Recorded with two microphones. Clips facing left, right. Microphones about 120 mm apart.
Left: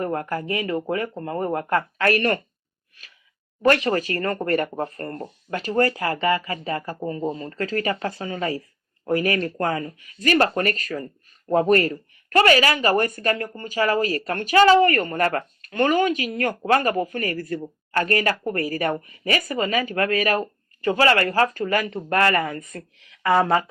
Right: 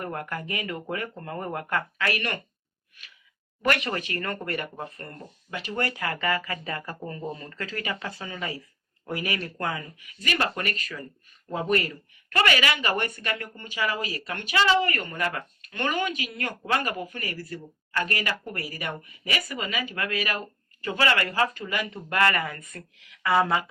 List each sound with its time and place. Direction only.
0.0 s speech: 30° left (ahead or behind)
3.6 s speech: 35° left (ahead or behind)